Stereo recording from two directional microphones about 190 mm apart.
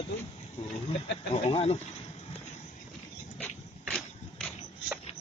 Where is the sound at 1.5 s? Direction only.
30° left (ahead or behind).